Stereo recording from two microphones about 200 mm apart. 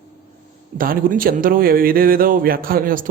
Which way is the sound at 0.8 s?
45° right (ahead or behind).